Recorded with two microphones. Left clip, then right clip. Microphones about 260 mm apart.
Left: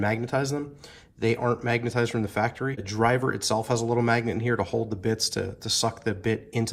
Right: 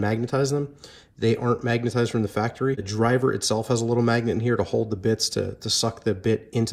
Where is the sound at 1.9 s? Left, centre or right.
Right.